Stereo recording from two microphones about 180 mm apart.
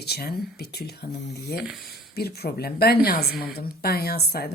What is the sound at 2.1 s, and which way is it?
A woman's voice, 60° left (ahead or behind).